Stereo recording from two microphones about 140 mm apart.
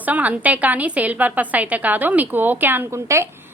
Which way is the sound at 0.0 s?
10° right (ahead or behind).